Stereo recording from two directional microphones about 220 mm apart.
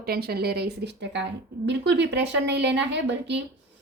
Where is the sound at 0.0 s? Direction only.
45° right (ahead or behind).